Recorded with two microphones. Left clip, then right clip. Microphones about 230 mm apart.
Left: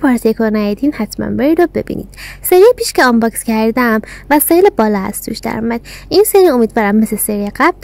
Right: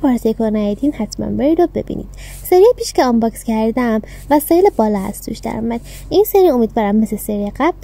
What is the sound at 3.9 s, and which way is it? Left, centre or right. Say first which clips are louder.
Speech: left 3 dB; left.